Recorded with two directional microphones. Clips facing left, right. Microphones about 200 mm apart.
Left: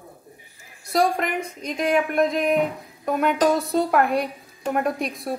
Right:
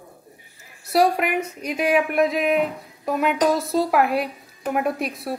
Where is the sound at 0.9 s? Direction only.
5° right (ahead or behind).